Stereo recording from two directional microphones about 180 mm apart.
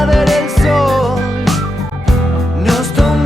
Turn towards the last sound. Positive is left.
turn(degrees=0)  # may be behind; listen again after turning